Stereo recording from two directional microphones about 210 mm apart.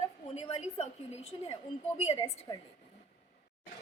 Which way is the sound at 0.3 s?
30° left (ahead or behind).